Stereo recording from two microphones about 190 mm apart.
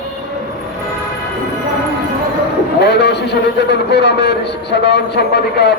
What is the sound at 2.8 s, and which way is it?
A man's voice, 60° left (ahead or behind).